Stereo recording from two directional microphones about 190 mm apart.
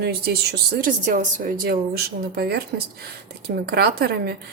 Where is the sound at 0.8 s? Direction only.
45° right (ahead or behind).